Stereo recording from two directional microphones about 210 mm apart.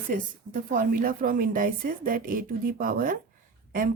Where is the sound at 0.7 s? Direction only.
40° right (ahead or behind).